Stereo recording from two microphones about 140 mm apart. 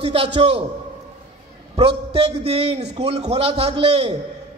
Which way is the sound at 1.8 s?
45° right (ahead or behind).